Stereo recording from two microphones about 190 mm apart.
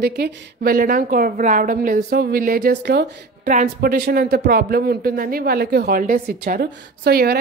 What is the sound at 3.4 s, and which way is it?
A woman's voice, 45° right (ahead or behind).